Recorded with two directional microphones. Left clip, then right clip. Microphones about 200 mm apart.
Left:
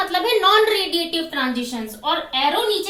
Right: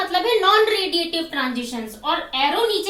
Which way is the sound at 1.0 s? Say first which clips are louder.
Even; 25° left (ahead or behind).